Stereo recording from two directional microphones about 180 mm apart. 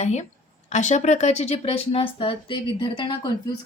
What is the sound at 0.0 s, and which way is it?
A woman's voice, 40° left (ahead or behind).